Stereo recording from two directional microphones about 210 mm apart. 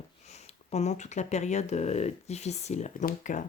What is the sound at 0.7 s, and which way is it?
Speech, 35° left (ahead or behind).